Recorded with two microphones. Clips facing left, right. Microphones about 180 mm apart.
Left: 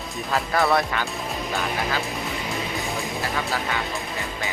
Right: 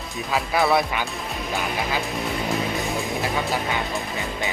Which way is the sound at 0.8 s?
15° right (ahead or behind).